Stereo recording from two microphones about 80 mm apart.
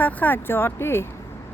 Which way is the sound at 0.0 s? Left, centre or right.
Left.